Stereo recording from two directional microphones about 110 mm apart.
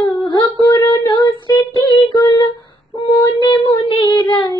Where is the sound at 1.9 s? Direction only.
50° left (ahead or behind).